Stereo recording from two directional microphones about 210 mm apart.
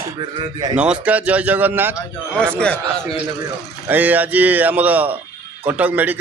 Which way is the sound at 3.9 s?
10° right (ahead or behind).